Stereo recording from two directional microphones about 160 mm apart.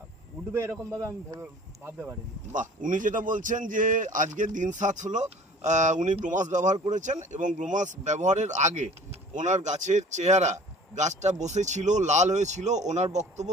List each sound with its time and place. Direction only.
0.5 s speech: 15° right (ahead or behind)
2.5 s a man's voice: 55° right (ahead or behind)